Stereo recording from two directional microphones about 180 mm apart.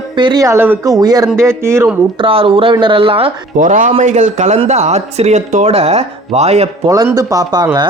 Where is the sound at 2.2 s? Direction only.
30° right (ahead or behind).